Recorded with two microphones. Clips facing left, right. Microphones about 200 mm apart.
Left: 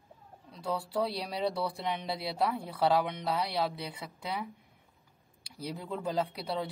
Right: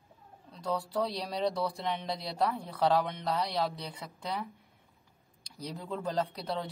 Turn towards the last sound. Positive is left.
turn(degrees=10)  # may be behind; listen again after turning